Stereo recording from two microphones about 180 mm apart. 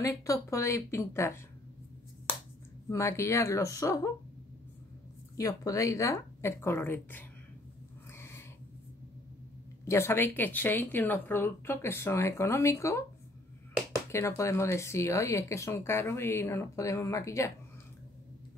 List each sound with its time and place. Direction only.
0.0 s speech: 15° left (ahead or behind)
2.9 s speech: 15° left (ahead or behind)
5.4 s speech: 20° left (ahead or behind)
8.1 s a sound: 15° left (ahead or behind)
9.8 s speech: 15° left (ahead or behind)
14.1 s speech: 15° left (ahead or behind)